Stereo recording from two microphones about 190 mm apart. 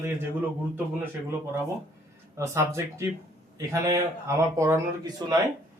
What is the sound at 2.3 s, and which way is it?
A man's voice, 15° right (ahead or behind).